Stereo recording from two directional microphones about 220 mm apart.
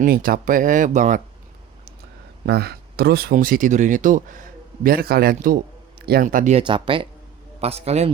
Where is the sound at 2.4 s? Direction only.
45° right (ahead or behind); by 8.1 s 30° right (ahead or behind).